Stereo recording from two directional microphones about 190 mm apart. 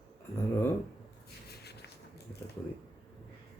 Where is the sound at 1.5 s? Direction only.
60° left (ahead or behind).